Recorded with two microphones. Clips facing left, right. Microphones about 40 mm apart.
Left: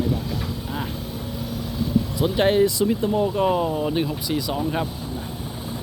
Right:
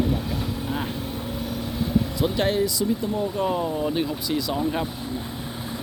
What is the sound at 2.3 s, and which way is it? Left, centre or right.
Speech, left.